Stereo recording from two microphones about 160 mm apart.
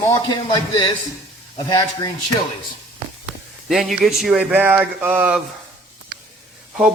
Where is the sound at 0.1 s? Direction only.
25° left (ahead or behind).